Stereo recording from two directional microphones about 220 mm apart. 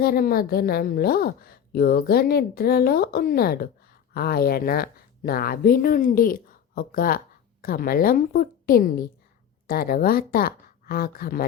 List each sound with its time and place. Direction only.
0.0 s a woman's voice: 45° left (ahead or behind)